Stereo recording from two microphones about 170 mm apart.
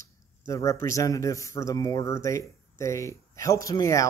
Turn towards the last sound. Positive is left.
turn(degrees=20)  # may be behind; listen again after turning